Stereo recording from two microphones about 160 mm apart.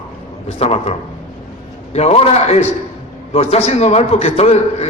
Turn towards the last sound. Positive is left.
turn(degrees=40)  # may be behind; listen again after turning